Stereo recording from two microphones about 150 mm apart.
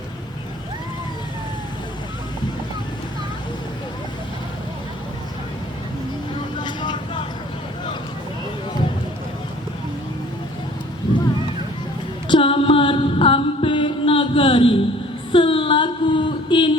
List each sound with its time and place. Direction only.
6.6 s vehicle: 30° left (ahead or behind)
12.3 s mantra: 35° left (ahead or behind)
15.3 s a sound: 35° left (ahead or behind)